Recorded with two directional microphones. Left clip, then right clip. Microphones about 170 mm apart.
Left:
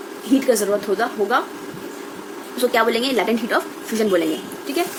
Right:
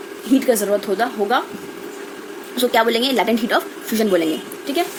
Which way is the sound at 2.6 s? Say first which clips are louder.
Right 1 dB; 45° right (ahead or behind).